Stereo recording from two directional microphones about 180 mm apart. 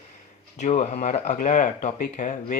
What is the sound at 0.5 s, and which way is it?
Speech, 40° left (ahead or behind).